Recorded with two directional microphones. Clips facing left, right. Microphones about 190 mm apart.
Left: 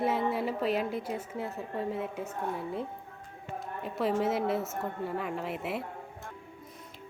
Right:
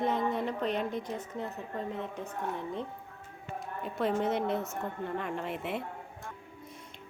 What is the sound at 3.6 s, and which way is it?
A woman's voice, centre (ahead or behind).